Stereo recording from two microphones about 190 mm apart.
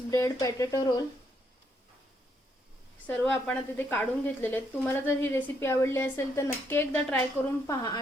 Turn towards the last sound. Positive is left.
turn(degrees=20)  # may be behind; listen again after turning